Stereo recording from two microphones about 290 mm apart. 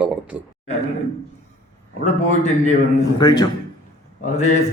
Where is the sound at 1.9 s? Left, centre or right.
Left.